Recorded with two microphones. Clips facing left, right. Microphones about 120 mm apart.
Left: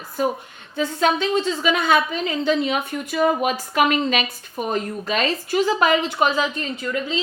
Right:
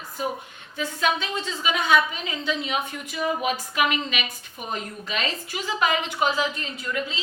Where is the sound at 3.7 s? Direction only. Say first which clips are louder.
Left 6 dB; 40° left (ahead or behind).